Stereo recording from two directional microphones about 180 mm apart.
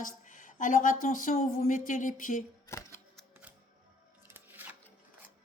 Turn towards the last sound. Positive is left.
turn(degrees=-10)  # may be behind; listen again after turning